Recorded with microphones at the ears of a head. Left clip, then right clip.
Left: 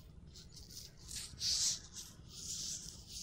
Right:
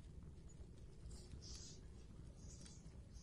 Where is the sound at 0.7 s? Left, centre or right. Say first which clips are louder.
Left 15 dB; left.